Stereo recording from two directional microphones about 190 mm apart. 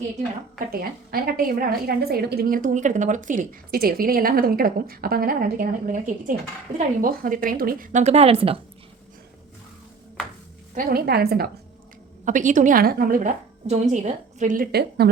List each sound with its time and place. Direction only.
0.7 s a woman's voice: 50° right (ahead or behind); by 8.5 s 30° right (ahead or behind)
10.8 s a woman's voice: 50° right (ahead or behind)
12.2 s a woman's voice: 40° right (ahead or behind); by 15.1 s 60° right (ahead or behind)